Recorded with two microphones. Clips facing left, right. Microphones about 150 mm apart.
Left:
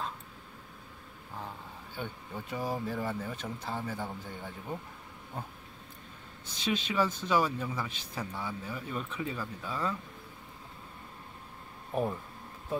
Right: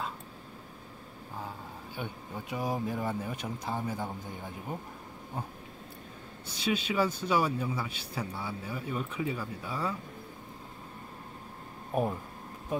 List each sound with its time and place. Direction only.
2.0 s speech: 10° right (ahead or behind)
6.4 s speech: 10° right (ahead or behind)
11.9 s speech: 10° right (ahead or behind)